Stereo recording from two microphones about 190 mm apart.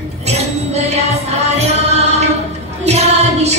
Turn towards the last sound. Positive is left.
turn(degrees=-35)  # may be behind; listen again after turning